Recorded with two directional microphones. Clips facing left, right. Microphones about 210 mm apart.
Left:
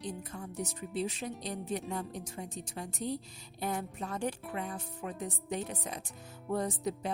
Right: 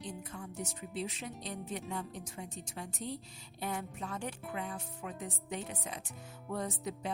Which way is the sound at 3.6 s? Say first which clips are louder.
Left 3 dB; 40° left (ahead or behind).